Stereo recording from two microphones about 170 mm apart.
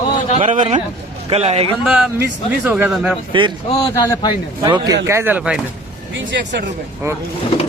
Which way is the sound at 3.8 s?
20° left (ahead or behind).